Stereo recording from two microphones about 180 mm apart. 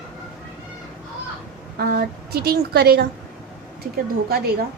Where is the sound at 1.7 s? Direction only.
55° right (ahead or behind).